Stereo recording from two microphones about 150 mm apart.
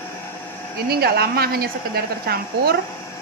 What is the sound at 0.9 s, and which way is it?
A woman's voice, 90° right.